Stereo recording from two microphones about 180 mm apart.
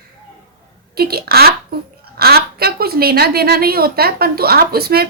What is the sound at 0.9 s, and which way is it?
A woman's voice, 60° right (ahead or behind).